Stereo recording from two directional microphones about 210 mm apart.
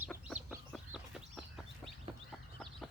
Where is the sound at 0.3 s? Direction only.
5° right (ahead or behind).